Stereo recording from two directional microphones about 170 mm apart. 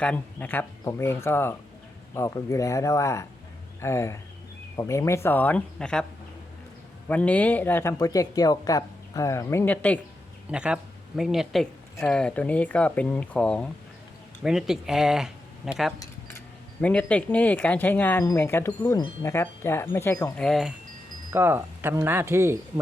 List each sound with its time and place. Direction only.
0.0 s speech: 10° left (ahead or behind)
7.1 s speech: 10° left (ahead or behind)
10.5 s speech: 5° right (ahead or behind); by 20.3 s 15° left (ahead or behind)
20.3 s speech: 5° left (ahead or behind)
21.3 s speech: 10° right (ahead or behind)